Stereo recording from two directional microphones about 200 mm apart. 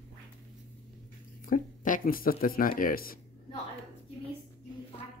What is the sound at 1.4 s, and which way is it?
Speech, 40° left (ahead or behind).